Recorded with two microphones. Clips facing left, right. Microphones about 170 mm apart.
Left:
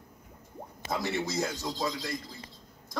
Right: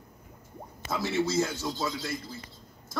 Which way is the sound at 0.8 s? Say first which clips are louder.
Right 3 dB; 15° left (ahead or behind).